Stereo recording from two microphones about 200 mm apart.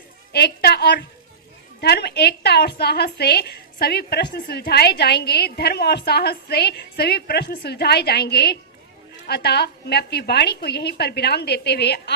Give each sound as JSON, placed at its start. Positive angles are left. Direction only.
{"t": 0.3, "sound": "a woman's voice", "side_deg": 55}